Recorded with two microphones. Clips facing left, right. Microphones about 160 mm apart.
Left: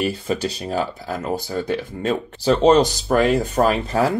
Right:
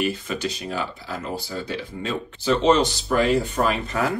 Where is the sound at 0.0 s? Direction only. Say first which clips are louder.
Left 3 dB; 35° left (ahead or behind).